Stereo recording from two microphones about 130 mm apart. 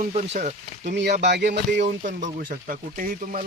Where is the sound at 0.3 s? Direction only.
65° right (ahead or behind).